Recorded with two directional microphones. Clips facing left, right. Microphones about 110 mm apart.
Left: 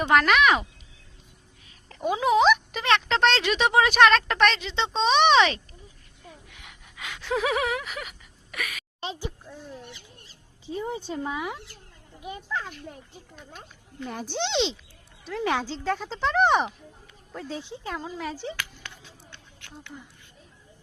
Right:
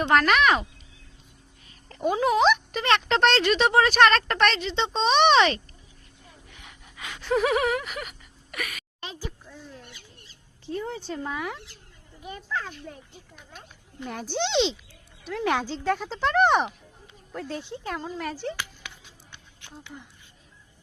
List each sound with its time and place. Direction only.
0.0 s speech: 5° left (ahead or behind)
6.5 s gasp: centre (ahead or behind)
8.5 s a woman's voice: centre (ahead or behind)
9.0 s a sound: 25° left (ahead or behind)
10.7 s speech: 10° left (ahead or behind)
12.2 s speech: 15° left (ahead or behind)
14.0 s speech: centre (ahead or behind)
19.3 s a sound: 15° right (ahead or behind)